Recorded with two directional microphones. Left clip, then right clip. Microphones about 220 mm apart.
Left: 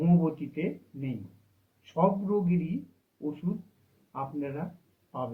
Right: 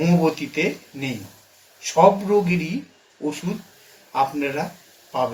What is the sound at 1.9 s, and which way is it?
Speech, 50° right (ahead or behind).